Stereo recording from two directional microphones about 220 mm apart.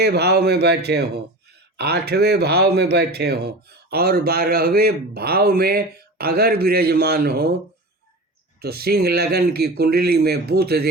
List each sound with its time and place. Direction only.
0.0 s a man's voice: 50° right (ahead or behind)
8.6 s a man's voice: 45° right (ahead or behind)